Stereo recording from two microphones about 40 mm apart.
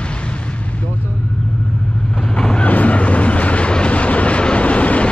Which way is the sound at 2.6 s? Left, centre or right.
Left.